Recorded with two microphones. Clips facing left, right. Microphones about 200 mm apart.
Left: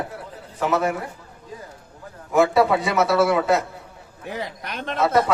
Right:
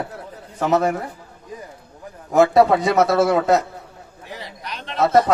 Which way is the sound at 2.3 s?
40° right (ahead or behind).